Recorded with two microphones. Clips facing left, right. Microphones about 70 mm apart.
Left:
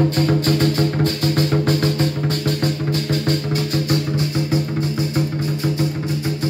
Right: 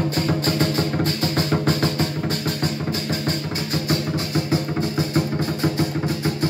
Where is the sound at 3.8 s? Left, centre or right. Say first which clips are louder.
Left 3 dB; right.